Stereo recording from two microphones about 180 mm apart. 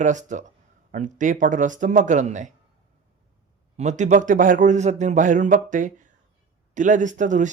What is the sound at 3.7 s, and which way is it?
Speech, 40° right (ahead or behind).